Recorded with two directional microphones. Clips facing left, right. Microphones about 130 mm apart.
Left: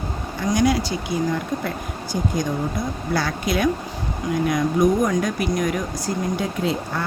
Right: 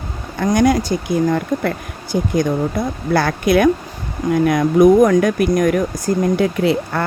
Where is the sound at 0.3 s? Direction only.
55° right (ahead or behind).